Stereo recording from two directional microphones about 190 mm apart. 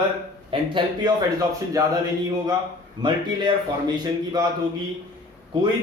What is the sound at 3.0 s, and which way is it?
A man's voice, 20° right (ahead or behind).